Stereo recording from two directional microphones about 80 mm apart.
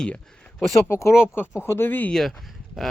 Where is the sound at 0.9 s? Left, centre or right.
Left.